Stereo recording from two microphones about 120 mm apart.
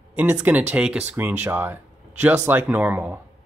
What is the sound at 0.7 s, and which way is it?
Speech, 10° right (ahead or behind).